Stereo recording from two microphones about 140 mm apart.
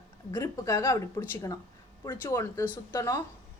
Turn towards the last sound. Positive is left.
turn(degrees=20)  # may be behind; listen again after turning